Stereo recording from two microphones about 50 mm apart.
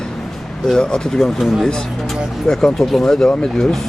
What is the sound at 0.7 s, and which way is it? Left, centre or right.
Speech, centre.